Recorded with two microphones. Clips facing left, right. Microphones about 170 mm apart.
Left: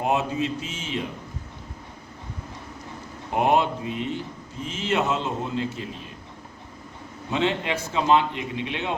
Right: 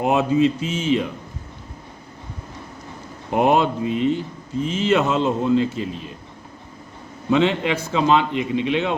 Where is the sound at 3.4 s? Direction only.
90° right.